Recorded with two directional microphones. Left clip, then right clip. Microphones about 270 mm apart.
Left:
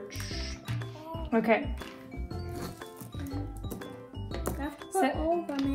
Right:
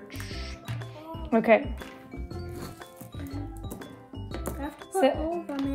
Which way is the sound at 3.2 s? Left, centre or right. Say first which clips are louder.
Right 1 dB; centre.